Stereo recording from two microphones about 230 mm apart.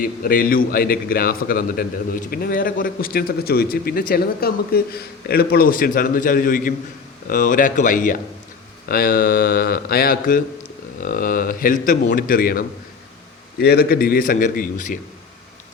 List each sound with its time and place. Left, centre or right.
0.0 s a man's voice: left